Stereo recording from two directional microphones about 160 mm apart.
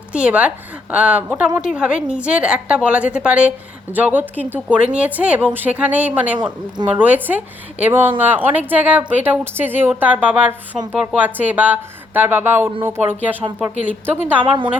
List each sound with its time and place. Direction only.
0.1 s a woman's voice: 10° right (ahead or behind)
14.4 s a woman's voice: 30° right (ahead or behind)